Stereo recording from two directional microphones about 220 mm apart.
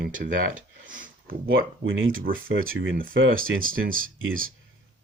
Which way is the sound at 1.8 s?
65° right (ahead or behind).